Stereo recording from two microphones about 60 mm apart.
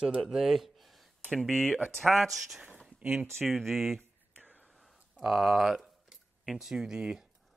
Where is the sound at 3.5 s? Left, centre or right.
Centre.